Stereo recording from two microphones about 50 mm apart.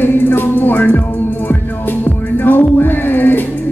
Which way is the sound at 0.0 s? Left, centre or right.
Left.